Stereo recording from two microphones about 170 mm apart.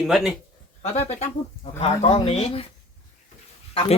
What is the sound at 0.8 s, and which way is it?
Speech, 40° left (ahead or behind).